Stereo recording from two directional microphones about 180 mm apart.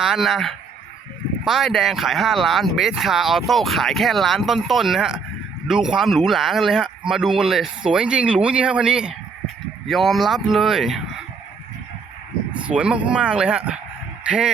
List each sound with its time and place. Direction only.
0.0 s speech: centre (ahead or behind)
12.5 s speech: 5° right (ahead or behind)